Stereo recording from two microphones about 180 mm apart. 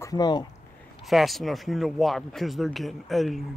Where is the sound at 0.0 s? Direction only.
20° left (ahead or behind).